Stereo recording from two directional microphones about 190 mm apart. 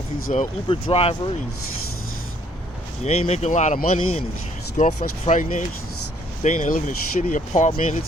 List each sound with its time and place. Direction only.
0.3 s speech: 30° left (ahead or behind)
3.0 s speech: 35° left (ahead or behind)